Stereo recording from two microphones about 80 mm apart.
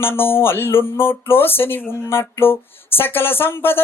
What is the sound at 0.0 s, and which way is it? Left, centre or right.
Speech, left.